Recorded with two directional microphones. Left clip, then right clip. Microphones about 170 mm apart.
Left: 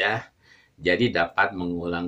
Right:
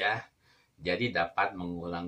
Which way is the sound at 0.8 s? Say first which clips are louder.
Left 8 dB; 20° left (ahead or behind).